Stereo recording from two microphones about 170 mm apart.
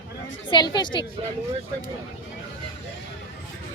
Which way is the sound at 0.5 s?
25° left (ahead or behind).